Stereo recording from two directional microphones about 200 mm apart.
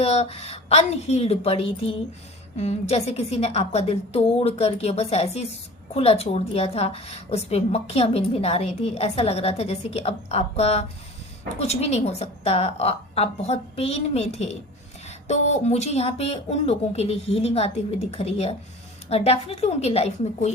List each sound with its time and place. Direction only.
0.0 s a woman's voice: 30° left (ahead or behind)